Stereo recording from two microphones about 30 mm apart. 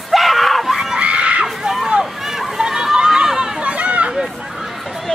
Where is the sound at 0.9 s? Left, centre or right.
Right.